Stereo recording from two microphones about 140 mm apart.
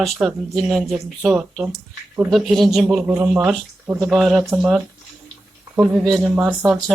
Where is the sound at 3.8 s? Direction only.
15° right (ahead or behind).